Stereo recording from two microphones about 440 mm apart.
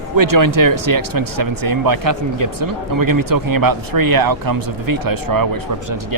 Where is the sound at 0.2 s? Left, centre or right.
Right.